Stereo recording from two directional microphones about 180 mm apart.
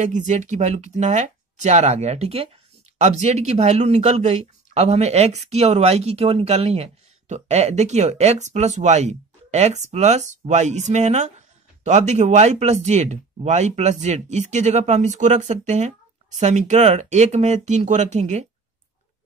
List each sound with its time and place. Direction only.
0.0 s speech: 40° right (ahead or behind)